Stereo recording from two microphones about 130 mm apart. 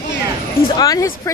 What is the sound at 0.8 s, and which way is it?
Speech, 25° left (ahead or behind).